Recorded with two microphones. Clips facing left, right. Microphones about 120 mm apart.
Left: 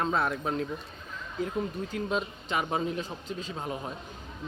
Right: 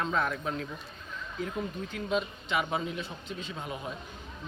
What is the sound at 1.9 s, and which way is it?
Speech, 35° left (ahead or behind).